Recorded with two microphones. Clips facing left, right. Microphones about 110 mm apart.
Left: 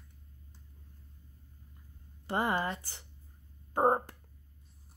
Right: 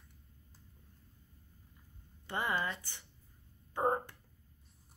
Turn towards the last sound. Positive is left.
turn(degrees=45)  # may be behind; listen again after turning